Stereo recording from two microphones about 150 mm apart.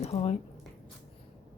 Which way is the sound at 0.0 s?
40° left (ahead or behind).